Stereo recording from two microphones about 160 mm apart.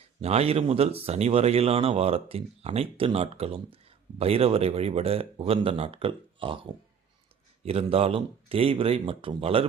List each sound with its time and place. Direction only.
0.2 s speech: 40° right (ahead or behind)
7.6 s speech: 40° right (ahead or behind)